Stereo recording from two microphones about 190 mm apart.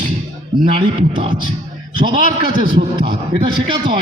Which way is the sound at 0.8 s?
25° right (ahead or behind).